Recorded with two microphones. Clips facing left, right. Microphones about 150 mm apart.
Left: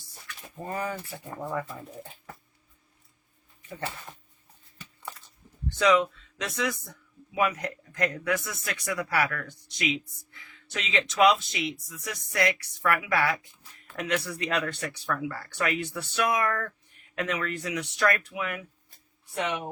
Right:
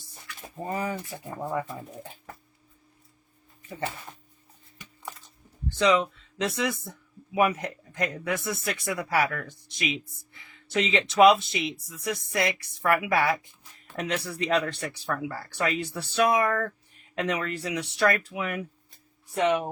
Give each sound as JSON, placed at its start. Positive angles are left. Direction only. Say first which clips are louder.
{"t": 0.5, "sound": "speech", "louder": "right 2 dB", "side_deg": -20}
{"t": 5.7, "sound": "speech", "louder": "even", "side_deg": -30}
{"t": 7.9, "sound": "speech", "louder": "left 1 dB", "side_deg": -25}